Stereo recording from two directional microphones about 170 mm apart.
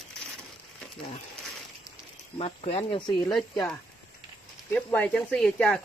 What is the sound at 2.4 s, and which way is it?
Speech, 35° left (ahead or behind).